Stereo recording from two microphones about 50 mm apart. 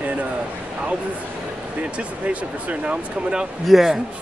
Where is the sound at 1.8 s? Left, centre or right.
Right.